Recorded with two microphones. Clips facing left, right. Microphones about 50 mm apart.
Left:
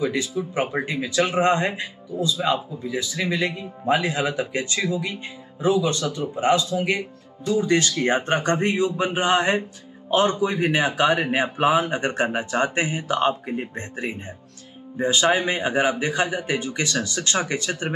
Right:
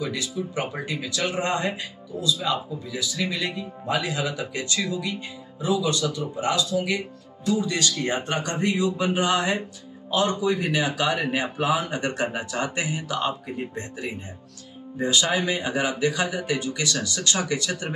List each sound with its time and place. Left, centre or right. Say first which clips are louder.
0.0 s speech: left 4 dB; left